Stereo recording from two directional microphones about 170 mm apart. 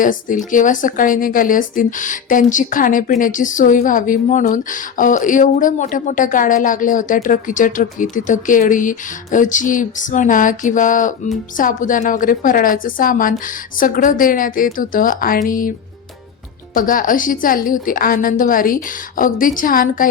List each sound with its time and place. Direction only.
0.0 s a woman's voice: 50° left (ahead or behind)
16.7 s a woman's voice: 55° left (ahead or behind)